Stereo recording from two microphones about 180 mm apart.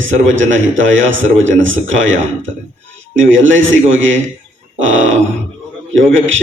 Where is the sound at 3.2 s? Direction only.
90° right.